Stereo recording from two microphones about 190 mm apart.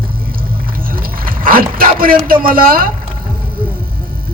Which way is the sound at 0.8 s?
50° right (ahead or behind).